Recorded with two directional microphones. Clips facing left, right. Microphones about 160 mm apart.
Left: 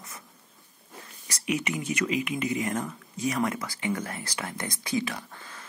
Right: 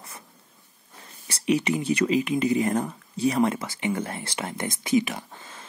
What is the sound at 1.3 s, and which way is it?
Speech, 30° right (ahead or behind).